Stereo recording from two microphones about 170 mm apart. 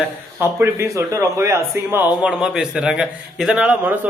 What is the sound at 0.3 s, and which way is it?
A man's voice, 15° right (ahead or behind).